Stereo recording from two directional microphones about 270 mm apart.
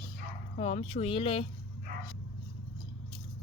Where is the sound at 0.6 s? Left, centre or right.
Left.